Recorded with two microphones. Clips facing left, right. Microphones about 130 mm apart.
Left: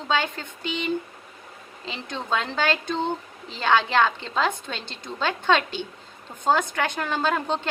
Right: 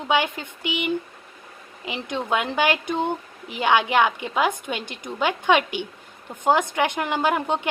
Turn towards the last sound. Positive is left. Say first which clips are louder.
# right 2 dB
turn(degrees=-15)  # may be behind; listen again after turning